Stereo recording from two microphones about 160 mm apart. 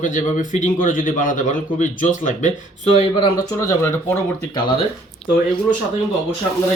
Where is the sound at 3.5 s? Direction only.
15° left (ahead or behind).